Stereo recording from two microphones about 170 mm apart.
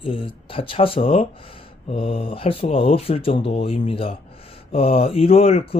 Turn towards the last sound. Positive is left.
turn(degrees=35)  # may be behind; listen again after turning